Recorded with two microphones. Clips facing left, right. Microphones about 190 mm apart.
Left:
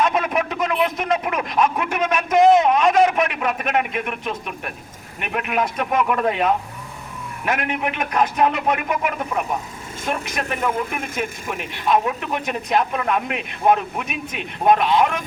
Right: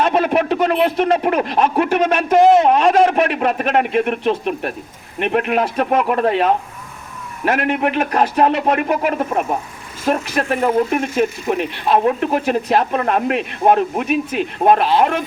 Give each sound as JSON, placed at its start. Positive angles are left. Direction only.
{"t": 0.0, "sound": "a man's voice", "side_deg": -30}